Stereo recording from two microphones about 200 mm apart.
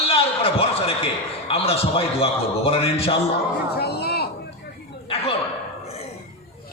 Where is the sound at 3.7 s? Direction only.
50° left (ahead or behind).